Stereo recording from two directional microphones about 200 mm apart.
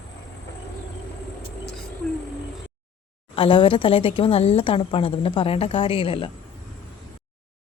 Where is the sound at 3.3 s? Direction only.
25° left (ahead or behind).